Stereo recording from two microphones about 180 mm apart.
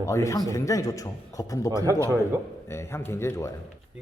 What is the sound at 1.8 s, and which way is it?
Speech, 15° right (ahead or behind).